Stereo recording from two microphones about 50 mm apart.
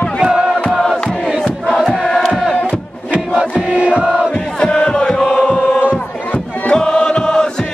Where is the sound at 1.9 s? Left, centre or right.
Centre.